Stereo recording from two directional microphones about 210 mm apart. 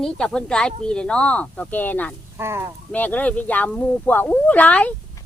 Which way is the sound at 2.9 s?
10° left (ahead or behind).